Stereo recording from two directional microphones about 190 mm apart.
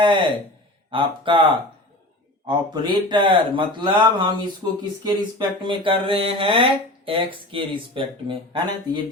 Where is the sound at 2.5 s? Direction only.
20° right (ahead or behind).